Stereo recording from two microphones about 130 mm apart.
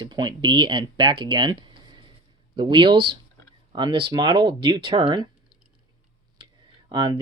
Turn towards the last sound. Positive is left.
turn(degrees=-35)  # may be behind; listen again after turning